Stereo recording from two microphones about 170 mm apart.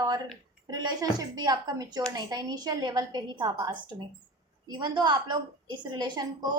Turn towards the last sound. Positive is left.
turn(degrees=-25)  # may be behind; listen again after turning